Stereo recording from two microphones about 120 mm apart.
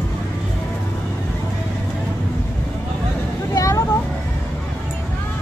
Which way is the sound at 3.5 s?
30° left (ahead or behind).